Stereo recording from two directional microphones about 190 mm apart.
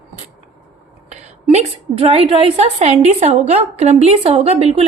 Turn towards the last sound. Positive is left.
turn(degrees=-35)  # may be behind; listen again after turning